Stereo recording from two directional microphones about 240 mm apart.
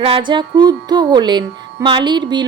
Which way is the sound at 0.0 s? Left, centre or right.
Right.